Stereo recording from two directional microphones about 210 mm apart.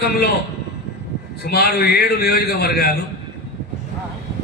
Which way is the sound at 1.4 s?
50° left (ahead or behind).